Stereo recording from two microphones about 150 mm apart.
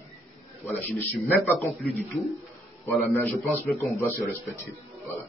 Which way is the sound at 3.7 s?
15° left (ahead or behind).